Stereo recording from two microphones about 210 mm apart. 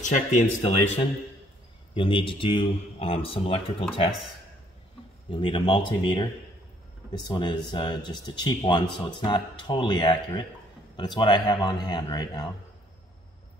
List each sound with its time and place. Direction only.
0.0 s speech: 35° left (ahead or behind)
2.0 s speech: 25° left (ahead or behind)
5.3 s speech: 25° left (ahead or behind)